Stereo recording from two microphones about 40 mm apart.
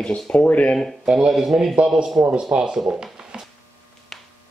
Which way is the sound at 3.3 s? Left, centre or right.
Centre.